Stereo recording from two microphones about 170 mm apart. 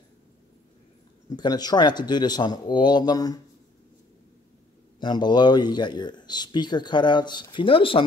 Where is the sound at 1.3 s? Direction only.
25° left (ahead or behind).